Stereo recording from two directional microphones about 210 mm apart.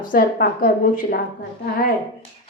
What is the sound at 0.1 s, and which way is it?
A woman's voice, 45° left (ahead or behind).